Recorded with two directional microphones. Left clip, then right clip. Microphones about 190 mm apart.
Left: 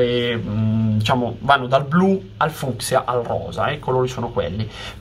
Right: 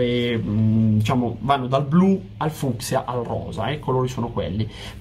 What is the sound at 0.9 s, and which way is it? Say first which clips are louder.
Speech: left 3 dB; 15° left (ahead or behind).